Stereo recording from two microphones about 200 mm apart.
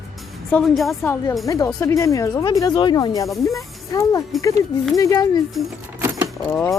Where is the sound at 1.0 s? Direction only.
15° left (ahead or behind).